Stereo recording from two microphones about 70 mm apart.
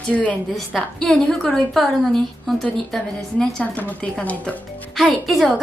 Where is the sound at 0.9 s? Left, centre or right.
Centre.